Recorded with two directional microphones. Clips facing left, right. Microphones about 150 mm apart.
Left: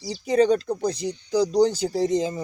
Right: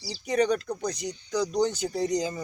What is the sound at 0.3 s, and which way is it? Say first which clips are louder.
Speech: left 5 dB; 30° left (ahead or behind).